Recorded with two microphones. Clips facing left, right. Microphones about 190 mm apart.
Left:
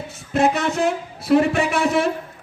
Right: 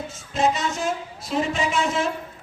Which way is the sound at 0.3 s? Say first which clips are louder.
Left 4 dB; 60° left (ahead or behind).